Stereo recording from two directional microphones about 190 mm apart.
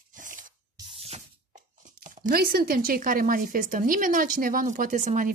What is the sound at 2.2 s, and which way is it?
Speech, 50° right (ahead or behind).